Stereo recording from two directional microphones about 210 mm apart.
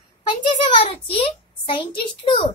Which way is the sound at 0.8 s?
25° left (ahead or behind).